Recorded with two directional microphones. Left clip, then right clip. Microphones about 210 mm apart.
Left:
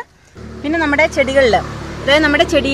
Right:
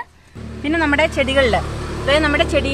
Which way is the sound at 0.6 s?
25° left (ahead or behind).